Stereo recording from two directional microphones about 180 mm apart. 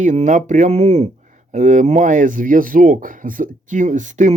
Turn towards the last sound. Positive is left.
turn(degrees=-45)  # may be behind; listen again after turning